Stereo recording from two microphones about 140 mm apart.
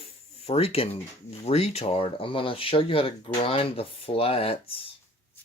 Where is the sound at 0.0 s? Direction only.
45° left (ahead or behind).